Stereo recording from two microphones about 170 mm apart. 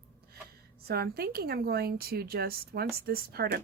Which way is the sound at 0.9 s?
65° right (ahead or behind).